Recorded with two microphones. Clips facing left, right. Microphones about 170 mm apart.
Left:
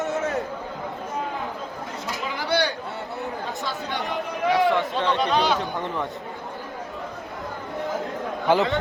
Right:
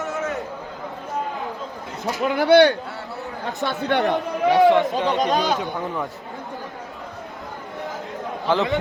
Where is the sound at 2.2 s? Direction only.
60° right (ahead or behind).